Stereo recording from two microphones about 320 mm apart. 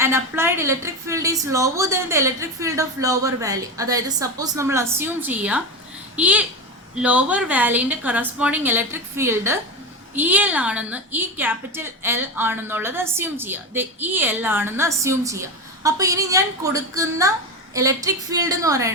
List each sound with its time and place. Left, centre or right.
0.0 s a woman's voice: centre